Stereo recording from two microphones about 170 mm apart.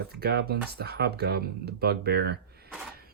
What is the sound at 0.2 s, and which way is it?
Speech, 70° right (ahead or behind).